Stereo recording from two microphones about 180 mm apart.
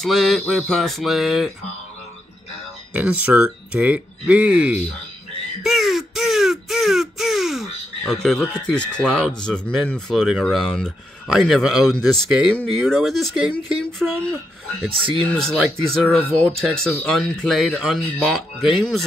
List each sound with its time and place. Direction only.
0.0 s speech: centre (ahead or behind)
2.9 s speech: 10° right (ahead or behind)
5.6 s a sound: centre (ahead or behind)
8.6 s speech: 5° left (ahead or behind)
14.9 s speech: 30° right (ahead or behind)
15.2 s speech: 5° left (ahead or behind)